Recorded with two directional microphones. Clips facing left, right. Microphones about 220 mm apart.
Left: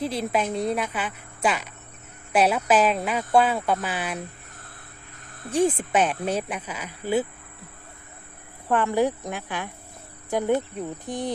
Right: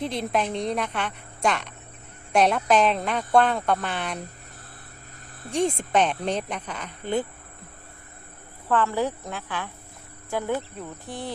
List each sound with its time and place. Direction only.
0.0 s speech: 5° left (ahead or behind)
5.5 s speech: 5° left (ahead or behind)
8.7 s speech: 15° left (ahead or behind)